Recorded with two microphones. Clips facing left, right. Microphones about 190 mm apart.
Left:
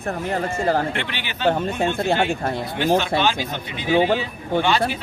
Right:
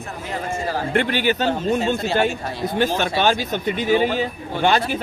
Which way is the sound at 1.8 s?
55° left (ahead or behind).